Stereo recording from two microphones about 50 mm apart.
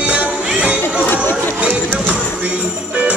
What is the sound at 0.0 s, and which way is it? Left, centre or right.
Music, right.